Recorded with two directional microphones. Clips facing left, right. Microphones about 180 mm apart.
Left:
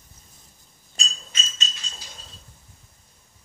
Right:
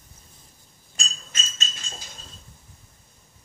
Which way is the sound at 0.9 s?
50° right (ahead or behind).